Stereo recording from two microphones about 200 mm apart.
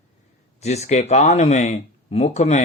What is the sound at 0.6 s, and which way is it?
Speech, 35° left (ahead or behind).